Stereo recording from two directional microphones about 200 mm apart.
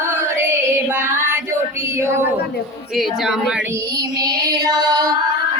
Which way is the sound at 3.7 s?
20° right (ahead or behind).